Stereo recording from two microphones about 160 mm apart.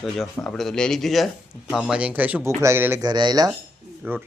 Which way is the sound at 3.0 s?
25° right (ahead or behind).